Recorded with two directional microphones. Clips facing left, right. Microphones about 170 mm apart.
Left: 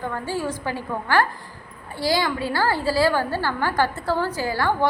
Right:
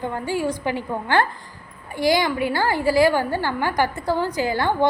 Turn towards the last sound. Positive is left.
turn(degrees=-20)  # may be behind; listen again after turning